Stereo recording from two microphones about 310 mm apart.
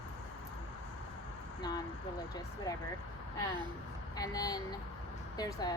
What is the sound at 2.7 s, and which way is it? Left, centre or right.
Speech, centre.